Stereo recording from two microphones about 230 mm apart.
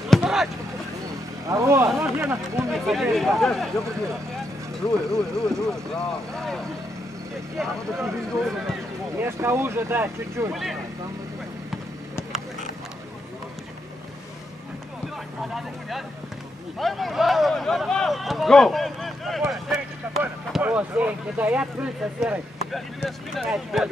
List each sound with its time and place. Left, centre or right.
0.1 s vehicle: centre
1.5 s speech: centre
2.7 s speech: centre
5.1 s speech: centre
6.3 s vehicle: centre
7.5 s speech: centre
9.2 s speech: centre
10.5 s speech: centre
16.7 s speech: centre